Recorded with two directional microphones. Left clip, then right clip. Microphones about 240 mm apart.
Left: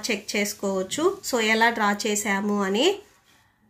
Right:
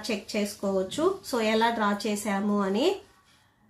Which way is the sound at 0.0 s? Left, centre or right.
Left.